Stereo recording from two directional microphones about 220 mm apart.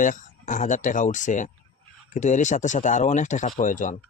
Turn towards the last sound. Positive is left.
turn(degrees=35)  # may be behind; listen again after turning